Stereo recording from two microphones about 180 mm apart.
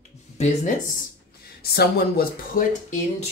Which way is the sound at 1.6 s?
60° left (ahead or behind).